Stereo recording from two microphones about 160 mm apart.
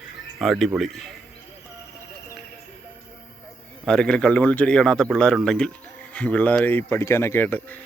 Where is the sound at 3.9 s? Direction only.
5° left (ahead or behind).